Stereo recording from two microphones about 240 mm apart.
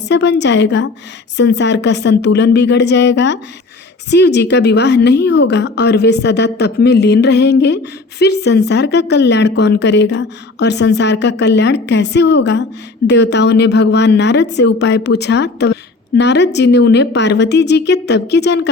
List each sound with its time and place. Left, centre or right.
0.1 s a woman's voice: left